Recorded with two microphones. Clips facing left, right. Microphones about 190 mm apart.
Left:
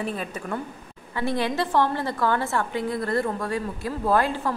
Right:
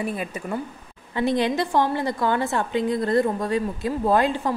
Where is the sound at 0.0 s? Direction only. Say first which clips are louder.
Right 2 dB; 10° right (ahead or behind).